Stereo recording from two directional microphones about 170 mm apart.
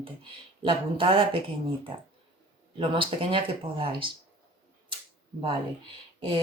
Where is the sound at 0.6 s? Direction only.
30° right (ahead or behind).